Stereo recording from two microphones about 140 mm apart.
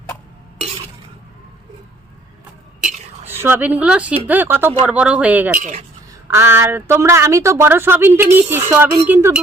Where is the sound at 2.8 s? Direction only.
60° right (ahead or behind).